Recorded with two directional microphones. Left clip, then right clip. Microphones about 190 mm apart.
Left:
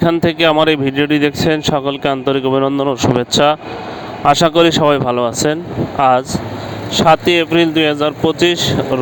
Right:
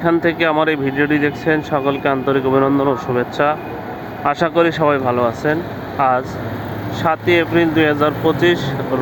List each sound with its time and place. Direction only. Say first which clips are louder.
0.0 s speech: left 3 dB; 60° left (ahead or behind)